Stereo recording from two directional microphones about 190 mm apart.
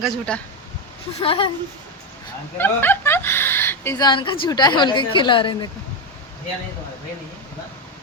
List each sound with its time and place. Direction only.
0.0 s speech: 5° left (ahead or behind)
1.2 s speech: 30° left (ahead or behind)
2.6 s speech: 10° left (ahead or behind); by 5.6 s 25° left (ahead or behind)